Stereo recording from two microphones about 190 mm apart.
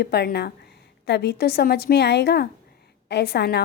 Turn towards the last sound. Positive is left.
turn(degrees=60)  # may be behind; listen again after turning